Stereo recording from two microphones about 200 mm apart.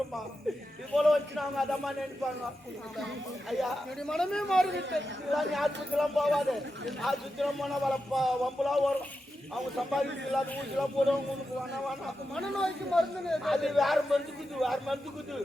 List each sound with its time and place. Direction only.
0.9 s speech: centre (ahead or behind)
3.5 s speech: centre (ahead or behind)
4.7 s a man's voice: 65° right (ahead or behind)
5.3 s speech: centre (ahead or behind)
11.9 s speech: 5° left (ahead or behind)